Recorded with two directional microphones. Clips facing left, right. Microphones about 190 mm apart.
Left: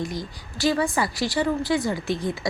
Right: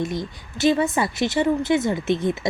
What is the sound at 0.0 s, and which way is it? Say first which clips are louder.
A woman's voice: right 4 dB; 25° right (ahead or behind).